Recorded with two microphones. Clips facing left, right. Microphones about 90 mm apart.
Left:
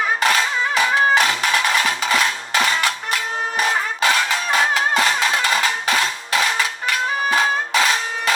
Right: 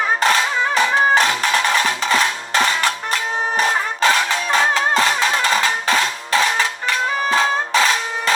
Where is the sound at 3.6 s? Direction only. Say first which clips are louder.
Right 1 dB; 35° right (ahead or behind).